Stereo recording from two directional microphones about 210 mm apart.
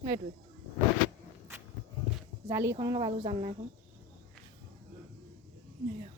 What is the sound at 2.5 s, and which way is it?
Speech, 15° right (ahead or behind).